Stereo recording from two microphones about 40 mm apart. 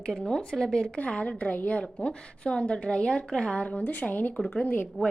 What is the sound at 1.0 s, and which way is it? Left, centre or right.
Speech, left.